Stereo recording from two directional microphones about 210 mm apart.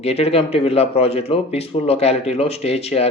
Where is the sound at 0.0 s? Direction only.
30° left (ahead or behind).